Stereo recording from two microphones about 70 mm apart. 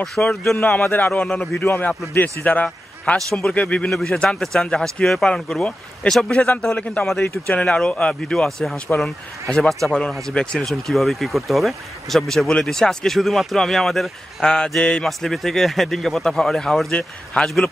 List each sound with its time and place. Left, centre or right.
0.0 s speech: centre
0.9 s a man's voice: left
1.2 s speech: centre
1.6 s a man's voice: left
3.9 s speech: centre
15.0 s speech: centre